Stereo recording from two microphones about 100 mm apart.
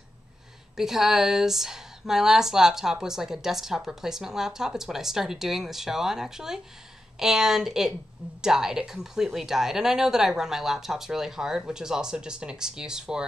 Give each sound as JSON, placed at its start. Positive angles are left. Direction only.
{"t": 0.7, "sound": "a woman's voice", "side_deg": -5}